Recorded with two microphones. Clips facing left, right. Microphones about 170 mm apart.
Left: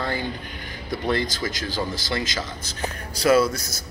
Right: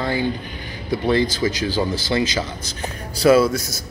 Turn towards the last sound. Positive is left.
turn(degrees=-30)  # may be behind; listen again after turning